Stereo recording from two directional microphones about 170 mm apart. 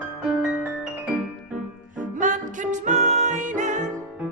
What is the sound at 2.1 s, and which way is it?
Music, 50° right (ahead or behind).